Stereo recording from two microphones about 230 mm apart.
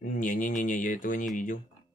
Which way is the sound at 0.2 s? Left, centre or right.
Left.